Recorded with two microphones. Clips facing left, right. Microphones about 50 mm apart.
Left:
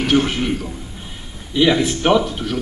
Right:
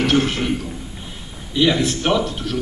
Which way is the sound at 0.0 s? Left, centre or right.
Centre.